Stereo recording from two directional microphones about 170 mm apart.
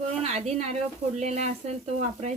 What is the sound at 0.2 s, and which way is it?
Speech, 40° right (ahead or behind).